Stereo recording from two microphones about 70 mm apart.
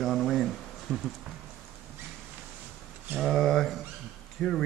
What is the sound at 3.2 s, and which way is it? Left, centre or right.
Speech, centre.